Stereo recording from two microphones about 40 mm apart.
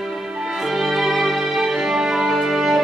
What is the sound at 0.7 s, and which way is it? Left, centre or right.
Music, centre.